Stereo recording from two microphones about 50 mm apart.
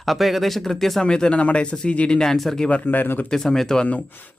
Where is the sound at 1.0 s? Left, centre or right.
Centre.